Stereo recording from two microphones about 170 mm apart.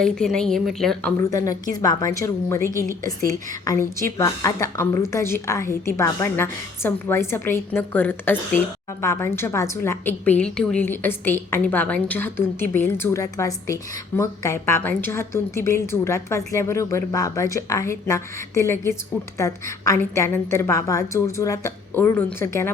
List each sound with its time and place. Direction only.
0.0 s a woman's voice: 5° left (ahead or behind)
1.1 s a woman's voice: 20° left (ahead or behind)